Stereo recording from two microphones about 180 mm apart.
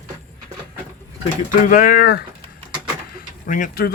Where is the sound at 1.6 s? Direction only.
50° left (ahead or behind).